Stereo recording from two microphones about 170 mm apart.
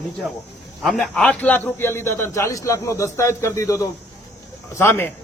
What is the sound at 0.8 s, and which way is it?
A man's voice, centre (ahead or behind).